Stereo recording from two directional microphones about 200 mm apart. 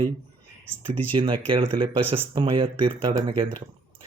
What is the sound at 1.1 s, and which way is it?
Speech, 25° right (ahead or behind).